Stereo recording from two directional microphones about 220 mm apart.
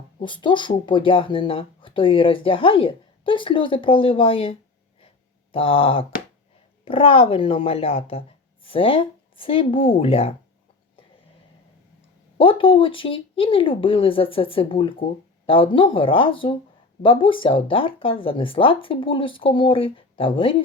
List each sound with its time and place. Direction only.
0.2 s speech: 20° left (ahead or behind)
4.9 s a sound: 25° left (ahead or behind)
6.8 s speech: 25° left (ahead or behind)
12.4 s speech: 25° left (ahead or behind)